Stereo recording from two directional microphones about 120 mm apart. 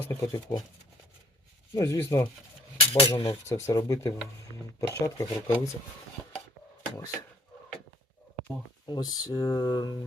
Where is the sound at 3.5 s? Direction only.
25° left (ahead or behind).